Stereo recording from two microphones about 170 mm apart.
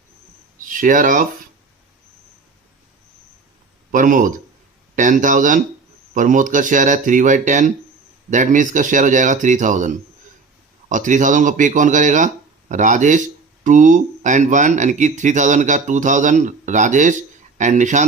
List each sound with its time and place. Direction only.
0.6 s speech: 50° right (ahead or behind)
3.9 s speech: 50° right (ahead or behind)